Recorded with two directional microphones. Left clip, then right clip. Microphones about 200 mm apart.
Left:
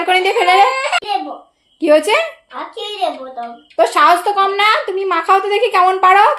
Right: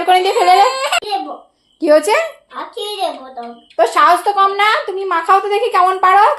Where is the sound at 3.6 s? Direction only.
15° left (ahead or behind).